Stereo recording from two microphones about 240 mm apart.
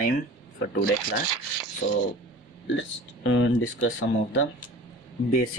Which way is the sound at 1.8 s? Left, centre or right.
Left.